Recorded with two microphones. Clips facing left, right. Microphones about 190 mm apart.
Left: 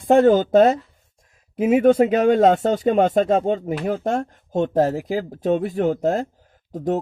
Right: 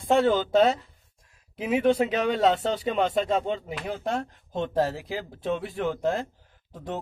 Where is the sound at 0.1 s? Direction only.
50° left (ahead or behind).